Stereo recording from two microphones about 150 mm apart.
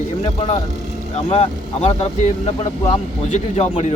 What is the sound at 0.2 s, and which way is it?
A man's voice, 45° left (ahead or behind).